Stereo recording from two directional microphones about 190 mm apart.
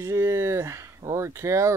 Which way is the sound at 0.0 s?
15° right (ahead or behind).